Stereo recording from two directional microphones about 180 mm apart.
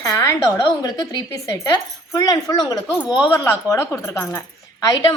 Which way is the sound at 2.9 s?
5° right (ahead or behind).